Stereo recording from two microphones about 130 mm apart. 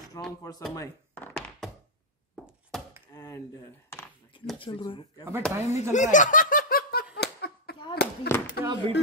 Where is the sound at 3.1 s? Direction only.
25° left (ahead or behind).